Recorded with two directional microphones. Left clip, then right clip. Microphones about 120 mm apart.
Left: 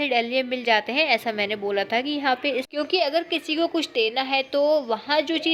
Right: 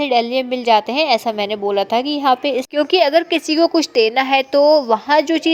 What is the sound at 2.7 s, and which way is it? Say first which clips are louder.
A woman's voice: right 11 dB; 60° right (ahead or behind).